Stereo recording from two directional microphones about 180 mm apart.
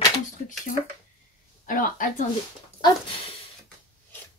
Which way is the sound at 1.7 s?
50° left (ahead or behind).